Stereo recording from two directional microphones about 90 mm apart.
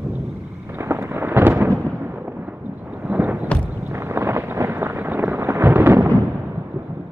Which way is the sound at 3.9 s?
30° right (ahead or behind).